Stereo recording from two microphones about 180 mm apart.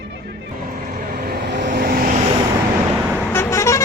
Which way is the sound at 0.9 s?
60° right (ahead or behind).